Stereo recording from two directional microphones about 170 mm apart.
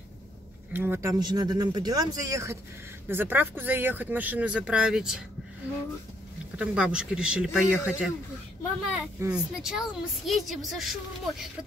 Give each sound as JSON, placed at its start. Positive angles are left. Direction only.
{"t": 0.7, "sound": "speech", "side_deg": -15}
{"t": 1.2, "sound": "speech", "side_deg": -25}
{"t": 6.5, "sound": "a woman's voice", "side_deg": -5}
{"t": 9.2, "sound": "a woman's voice", "side_deg": -5}